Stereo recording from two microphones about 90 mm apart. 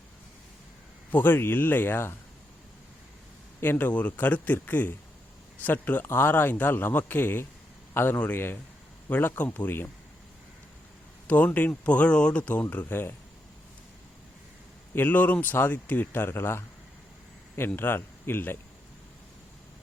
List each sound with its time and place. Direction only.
1.1 s a man's voice: 25° left (ahead or behind)
3.6 s a man's voice: 20° left (ahead or behind)
11.3 s speech: 15° left (ahead or behind)
12.9 s a man's voice: 25° left (ahead or behind)
14.9 s a man's voice: 20° left (ahead or behind)
17.7 s speech: 25° left (ahead or behind)